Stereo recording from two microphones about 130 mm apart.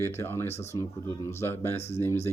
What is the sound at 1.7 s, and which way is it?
Speech, 55° left (ahead or behind).